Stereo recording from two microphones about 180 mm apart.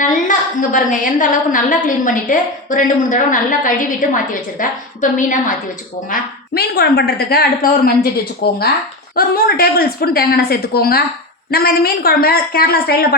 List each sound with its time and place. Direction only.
0.0 s a woman's voice: 45° left (ahead or behind)
6.1 s a woman's voice: 60° left (ahead or behind)